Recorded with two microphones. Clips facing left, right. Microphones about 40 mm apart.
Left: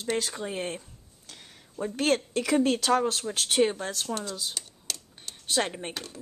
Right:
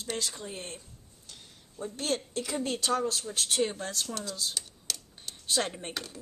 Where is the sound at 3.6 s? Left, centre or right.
Left.